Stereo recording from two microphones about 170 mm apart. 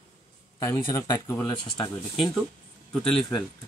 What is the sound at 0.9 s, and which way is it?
Speech, 20° left (ahead or behind).